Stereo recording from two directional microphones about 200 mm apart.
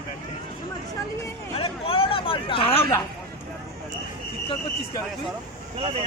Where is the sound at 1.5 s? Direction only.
30° left (ahead or behind).